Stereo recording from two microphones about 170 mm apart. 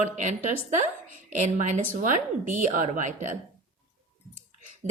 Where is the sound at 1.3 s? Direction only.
45° right (ahead or behind).